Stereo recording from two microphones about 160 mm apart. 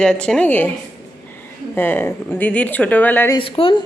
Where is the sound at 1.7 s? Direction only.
15° left (ahead or behind).